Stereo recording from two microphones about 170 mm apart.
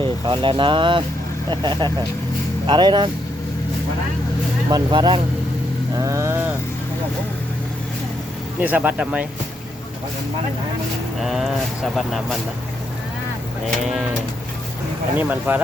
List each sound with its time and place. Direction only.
0.0 s speech: 30° right (ahead or behind)
4.7 s speech: 25° right (ahead or behind)
6.0 s speech: 15° right (ahead or behind)
8.6 s speech: 10° right (ahead or behind)
11.2 s speech: centre (ahead or behind)
15.2 s speech: 10° right (ahead or behind)